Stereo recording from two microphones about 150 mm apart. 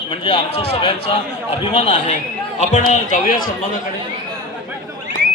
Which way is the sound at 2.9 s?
60° left (ahead or behind).